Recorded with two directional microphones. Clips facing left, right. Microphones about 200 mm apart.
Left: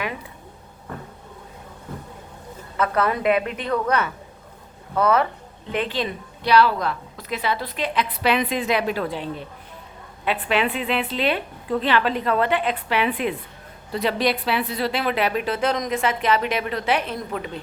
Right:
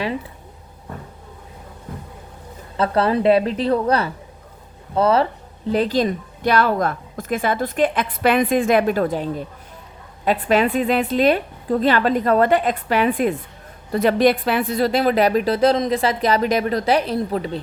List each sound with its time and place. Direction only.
2.7 s a woman's voice: 30° right (ahead or behind)